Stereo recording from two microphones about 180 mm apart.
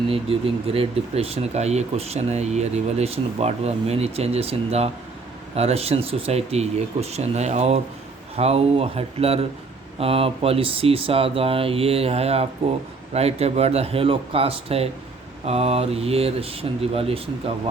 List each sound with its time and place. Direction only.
0.1 s speech: 30° right (ahead or behind)